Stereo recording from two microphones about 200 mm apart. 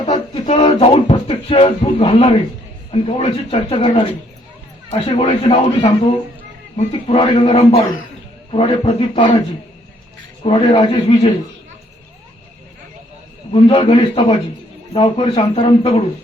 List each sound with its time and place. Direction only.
0.0 s a man's voice: 35° left (ahead or behind)
10.4 s a man's voice: 25° left (ahead or behind)
13.5 s a man's voice: 25° left (ahead or behind)